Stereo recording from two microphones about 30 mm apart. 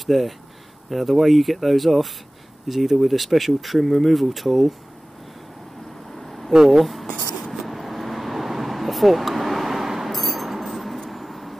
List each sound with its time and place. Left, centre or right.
0.0 s speech: centre
6.1 s vehicle: centre
6.5 s speech: centre
6.8 s speech: centre
7.5 s vehicle: centre
10.1 s a sound: centre
11.1 s vehicle: centre